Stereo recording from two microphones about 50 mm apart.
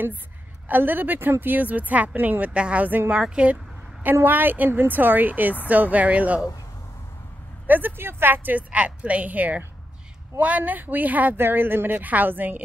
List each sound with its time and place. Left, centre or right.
0.7 s speech: right
2.5 s speech: right
4.0 s speech: right
7.6 s speech: right
11.3 s speech: right